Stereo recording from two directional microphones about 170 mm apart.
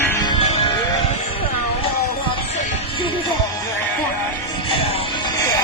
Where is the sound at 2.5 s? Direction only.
45° left (ahead or behind).